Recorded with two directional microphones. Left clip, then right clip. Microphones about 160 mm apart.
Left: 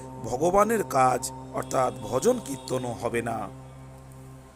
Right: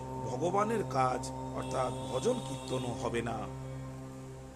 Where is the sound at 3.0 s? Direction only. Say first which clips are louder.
Left 7 dB; 35° left (ahead or behind).